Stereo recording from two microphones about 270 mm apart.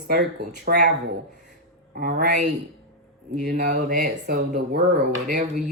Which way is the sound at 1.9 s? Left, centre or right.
Right.